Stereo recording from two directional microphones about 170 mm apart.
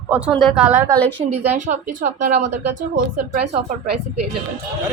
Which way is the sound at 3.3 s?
40° right (ahead or behind).